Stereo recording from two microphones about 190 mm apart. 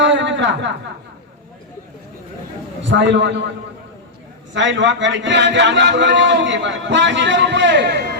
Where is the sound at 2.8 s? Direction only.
75° right (ahead or behind).